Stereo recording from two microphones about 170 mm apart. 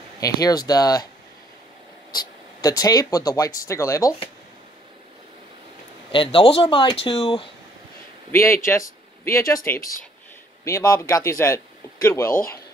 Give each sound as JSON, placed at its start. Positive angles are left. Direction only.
{"t": 0.2, "sound": "speech", "side_deg": 20}
{"t": 2.1, "sound": "speech", "side_deg": 20}
{"t": 6.1, "sound": "speech", "side_deg": 30}
{"t": 8.3, "sound": "speech", "side_deg": 15}
{"t": 10.6, "sound": "speech", "side_deg": 20}